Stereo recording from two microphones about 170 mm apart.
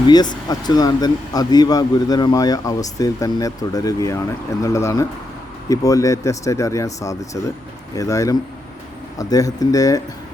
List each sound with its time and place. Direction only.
0.1 s speech: 25° left (ahead or behind)